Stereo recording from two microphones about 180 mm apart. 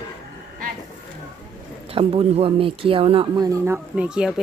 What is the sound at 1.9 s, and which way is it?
Speech, 30° right (ahead or behind).